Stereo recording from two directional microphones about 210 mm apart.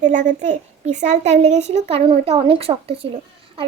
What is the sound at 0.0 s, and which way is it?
A child's voice, 35° right (ahead or behind).